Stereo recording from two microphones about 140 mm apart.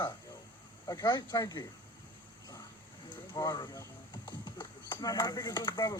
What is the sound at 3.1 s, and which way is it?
A man's voice, 30° left (ahead or behind).